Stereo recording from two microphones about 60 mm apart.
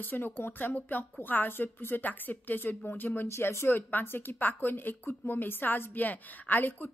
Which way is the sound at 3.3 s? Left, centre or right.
Left.